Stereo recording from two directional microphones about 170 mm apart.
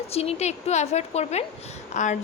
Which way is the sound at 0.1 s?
35° left (ahead or behind).